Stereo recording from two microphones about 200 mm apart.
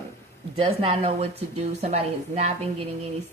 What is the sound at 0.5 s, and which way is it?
A woman's voice, 25° right (ahead or behind).